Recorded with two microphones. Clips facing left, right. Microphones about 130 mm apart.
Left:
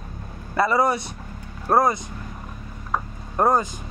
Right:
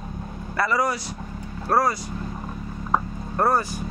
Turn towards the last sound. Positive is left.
turn(degrees=20)  # may be behind; listen again after turning